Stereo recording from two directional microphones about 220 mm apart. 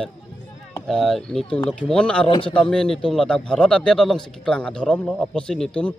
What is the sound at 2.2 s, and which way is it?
Speech, 25° left (ahead or behind).